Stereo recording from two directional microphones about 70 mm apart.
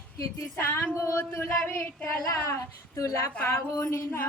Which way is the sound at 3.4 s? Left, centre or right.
Left.